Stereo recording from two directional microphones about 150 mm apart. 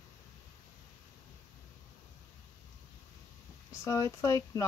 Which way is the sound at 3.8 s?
20° left (ahead or behind).